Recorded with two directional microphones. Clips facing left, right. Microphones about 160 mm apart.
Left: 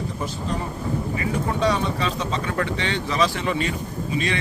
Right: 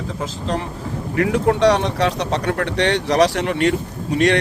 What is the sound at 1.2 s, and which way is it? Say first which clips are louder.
Speech: right 11 dB; 75° right (ahead or behind).